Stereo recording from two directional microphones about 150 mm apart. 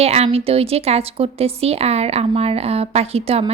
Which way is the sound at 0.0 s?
45° right (ahead or behind).